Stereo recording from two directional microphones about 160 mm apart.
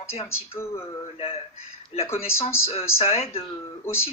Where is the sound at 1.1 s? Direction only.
40° left (ahead or behind).